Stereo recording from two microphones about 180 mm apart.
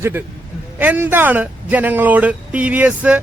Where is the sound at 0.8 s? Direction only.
10° right (ahead or behind).